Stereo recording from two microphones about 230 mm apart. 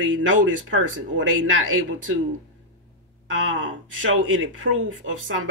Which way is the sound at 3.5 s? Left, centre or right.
Right.